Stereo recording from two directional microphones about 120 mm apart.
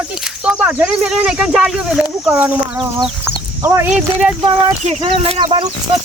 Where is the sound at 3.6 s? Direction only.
20° right (ahead or behind).